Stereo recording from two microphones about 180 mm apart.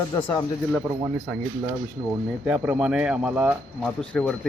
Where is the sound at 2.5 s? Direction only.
5° right (ahead or behind).